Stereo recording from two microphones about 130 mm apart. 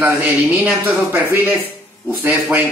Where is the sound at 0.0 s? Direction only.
15° right (ahead or behind).